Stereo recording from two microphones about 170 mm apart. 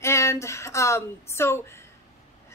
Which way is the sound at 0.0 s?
15° left (ahead or behind).